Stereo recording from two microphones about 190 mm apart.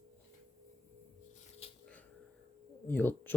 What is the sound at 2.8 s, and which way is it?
Speech, 10° left (ahead or behind).